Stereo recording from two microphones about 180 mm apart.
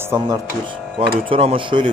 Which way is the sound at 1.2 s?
30° right (ahead or behind).